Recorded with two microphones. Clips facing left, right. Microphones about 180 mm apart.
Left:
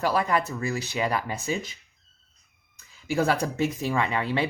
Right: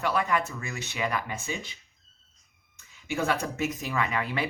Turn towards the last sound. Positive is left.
turn(degrees=30)  # may be behind; listen again after turning